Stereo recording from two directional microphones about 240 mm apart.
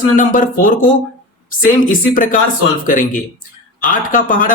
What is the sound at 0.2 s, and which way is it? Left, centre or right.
Speech, left.